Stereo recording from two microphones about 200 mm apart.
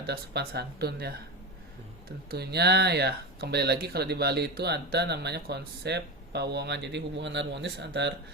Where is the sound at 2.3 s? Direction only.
55° right (ahead or behind).